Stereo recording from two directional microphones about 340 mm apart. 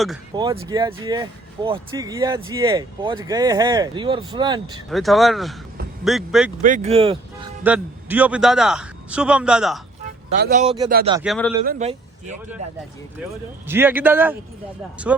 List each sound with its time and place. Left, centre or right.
0.3 s speech: centre
4.9 s a man's voice: centre
6.6 s speech: right
7.6 s a man's voice: centre
10.4 s a man's voice: right
11.1 s a man's voice: centre
11.6 s a man's voice: right
13.7 s a man's voice: centre